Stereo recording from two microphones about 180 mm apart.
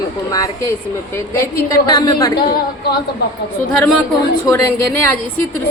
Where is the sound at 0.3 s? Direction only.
20° left (ahead or behind).